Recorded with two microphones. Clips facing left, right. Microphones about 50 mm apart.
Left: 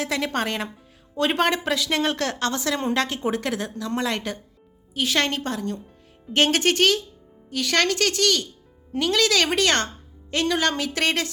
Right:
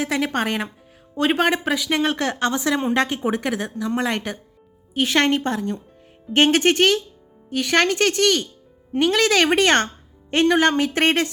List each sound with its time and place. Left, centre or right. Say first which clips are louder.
0.0 s a woman's voice: right 3 dB; centre
4.9 s speech: right 5 dB; right